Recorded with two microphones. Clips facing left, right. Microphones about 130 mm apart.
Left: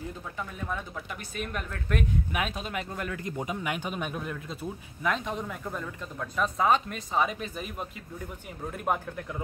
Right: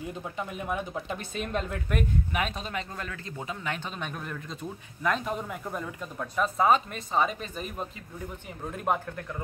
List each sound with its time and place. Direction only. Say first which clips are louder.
0.4 s speech: right 3 dB; 15° right (ahead or behind)
1.9 s speech: even; centre (ahead or behind)
8.7 s speech: right 1 dB; 5° left (ahead or behind)